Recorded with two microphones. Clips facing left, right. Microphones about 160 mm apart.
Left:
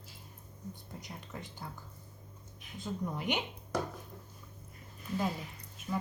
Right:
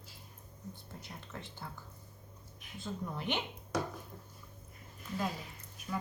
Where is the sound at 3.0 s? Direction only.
15° left (ahead or behind).